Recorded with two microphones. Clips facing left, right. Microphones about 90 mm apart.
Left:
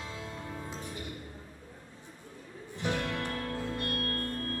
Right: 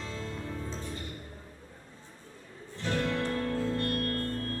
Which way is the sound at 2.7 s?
15° left (ahead or behind).